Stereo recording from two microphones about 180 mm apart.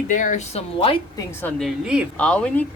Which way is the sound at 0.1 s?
45° left (ahead or behind).